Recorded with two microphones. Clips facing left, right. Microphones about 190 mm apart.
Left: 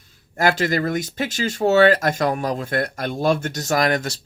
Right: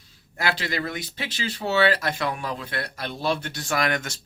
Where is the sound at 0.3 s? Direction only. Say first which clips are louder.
Left 8 dB; 45° left (ahead or behind).